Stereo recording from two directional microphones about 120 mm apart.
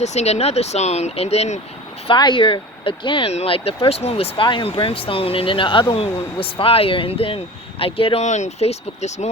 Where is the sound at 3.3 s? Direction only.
55° left (ahead or behind).